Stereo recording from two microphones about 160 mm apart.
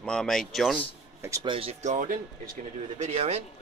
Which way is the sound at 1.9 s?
55° right (ahead or behind).